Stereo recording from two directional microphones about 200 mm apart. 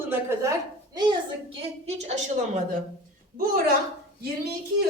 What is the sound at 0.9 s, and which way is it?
A woman's voice, 25° right (ahead or behind).